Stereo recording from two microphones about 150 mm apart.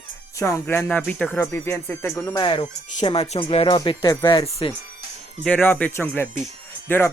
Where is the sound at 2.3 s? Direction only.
30° left (ahead or behind).